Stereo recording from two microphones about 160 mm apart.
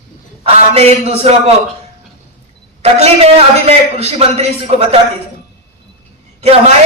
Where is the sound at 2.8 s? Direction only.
40° right (ahead or behind).